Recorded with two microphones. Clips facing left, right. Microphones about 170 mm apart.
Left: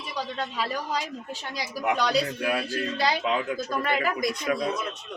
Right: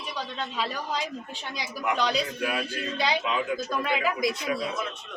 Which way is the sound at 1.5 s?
40° left (ahead or behind).